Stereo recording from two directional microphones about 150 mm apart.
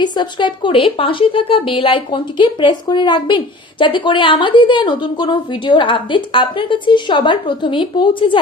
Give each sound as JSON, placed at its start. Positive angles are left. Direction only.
{"t": 0.0, "sound": "a woman's voice", "side_deg": 30}